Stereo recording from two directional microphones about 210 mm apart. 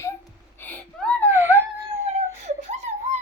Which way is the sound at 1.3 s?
10° right (ahead or behind).